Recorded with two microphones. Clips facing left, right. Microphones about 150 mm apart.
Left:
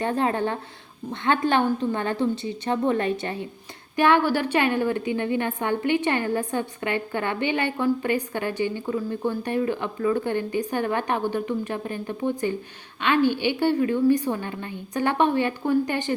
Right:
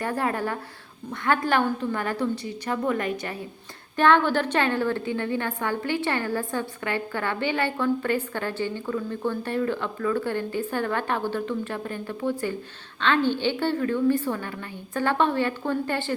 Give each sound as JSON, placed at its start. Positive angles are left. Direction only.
{"t": 0.0, "sound": "a woman's voice", "side_deg": 25}
{"t": 3.9, "sound": "a woman's voice", "side_deg": 10}